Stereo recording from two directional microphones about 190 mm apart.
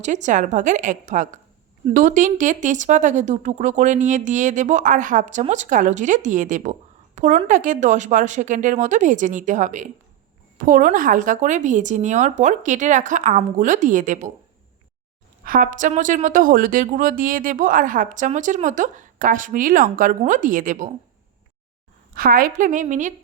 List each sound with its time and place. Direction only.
0.0 s speech: 40° right (ahead or behind)
15.4 s a woman's voice: 45° right (ahead or behind)
22.1 s a woman's voice: 50° right (ahead or behind)